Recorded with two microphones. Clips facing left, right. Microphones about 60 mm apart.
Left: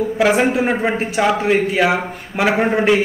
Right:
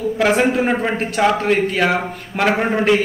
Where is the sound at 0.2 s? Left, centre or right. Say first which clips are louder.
Left 1 dB; centre.